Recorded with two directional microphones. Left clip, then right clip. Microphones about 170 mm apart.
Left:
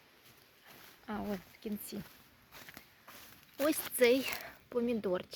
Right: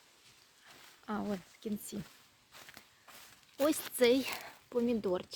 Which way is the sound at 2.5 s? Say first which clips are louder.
Left 1 dB; 55° left (ahead or behind).